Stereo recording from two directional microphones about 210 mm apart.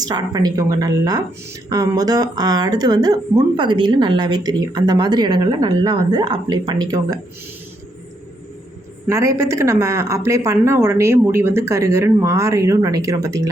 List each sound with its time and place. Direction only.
0.0 s speech: 20° right (ahead or behind)
9.0 s speech: 15° right (ahead or behind)